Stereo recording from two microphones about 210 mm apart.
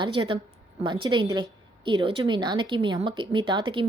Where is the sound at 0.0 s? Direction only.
25° right (ahead or behind).